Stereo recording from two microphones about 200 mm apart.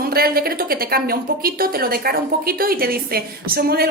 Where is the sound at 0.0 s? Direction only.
50° right (ahead or behind).